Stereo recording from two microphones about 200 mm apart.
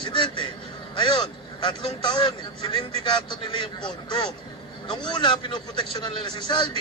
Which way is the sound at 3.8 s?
20° left (ahead or behind).